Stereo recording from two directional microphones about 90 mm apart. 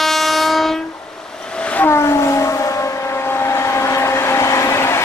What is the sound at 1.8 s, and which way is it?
Vehicle, 30° left (ahead or behind).